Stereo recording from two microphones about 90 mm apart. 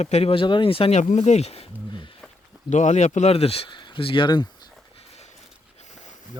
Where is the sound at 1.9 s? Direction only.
65° left (ahead or behind).